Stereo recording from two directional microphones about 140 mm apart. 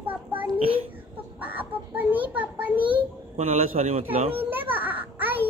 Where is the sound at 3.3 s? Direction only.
50° right (ahead or behind).